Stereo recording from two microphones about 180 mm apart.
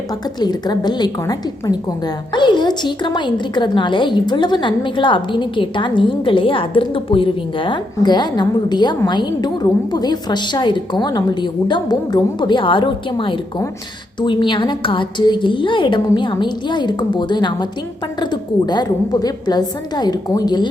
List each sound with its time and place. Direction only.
0.3 s a woman's voice: 25° left (ahead or behind)